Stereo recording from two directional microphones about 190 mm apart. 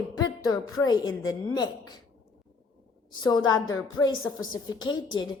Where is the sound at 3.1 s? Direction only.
20° left (ahead or behind).